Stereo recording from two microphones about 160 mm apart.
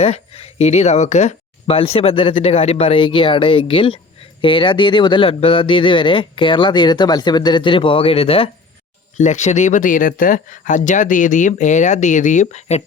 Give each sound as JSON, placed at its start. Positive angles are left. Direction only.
{"t": 0.0, "sound": "speech", "side_deg": 40}
{"t": 9.1, "sound": "speech", "side_deg": 50}